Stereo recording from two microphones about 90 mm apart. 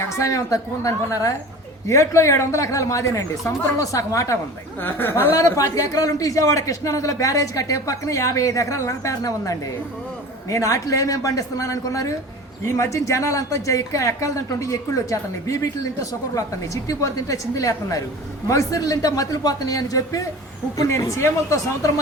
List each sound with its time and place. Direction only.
0.2 s speech: 35° left (ahead or behind)
4.8 s speech: 25° left (ahead or behind)